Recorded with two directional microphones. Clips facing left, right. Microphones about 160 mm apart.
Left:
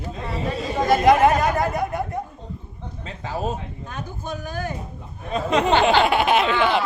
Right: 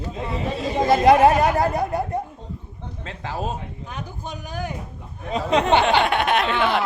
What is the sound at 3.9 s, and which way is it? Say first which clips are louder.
Speech: left 3 dB; 15° right (ahead or behind).